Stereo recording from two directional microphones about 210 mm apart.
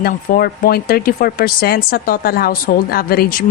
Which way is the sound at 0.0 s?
45° left (ahead or behind).